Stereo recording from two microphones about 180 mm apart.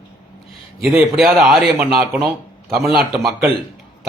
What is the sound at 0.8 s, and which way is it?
A man's voice, 5° right (ahead or behind).